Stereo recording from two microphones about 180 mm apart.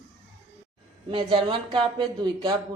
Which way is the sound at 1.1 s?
30° right (ahead or behind).